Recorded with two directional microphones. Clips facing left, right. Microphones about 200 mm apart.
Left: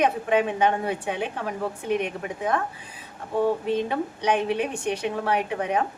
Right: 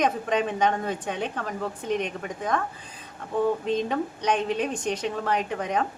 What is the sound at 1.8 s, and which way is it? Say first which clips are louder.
Speech: left 2 dB; 55° left (ahead or behind).